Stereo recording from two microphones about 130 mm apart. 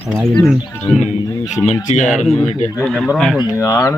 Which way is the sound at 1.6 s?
65° left (ahead or behind).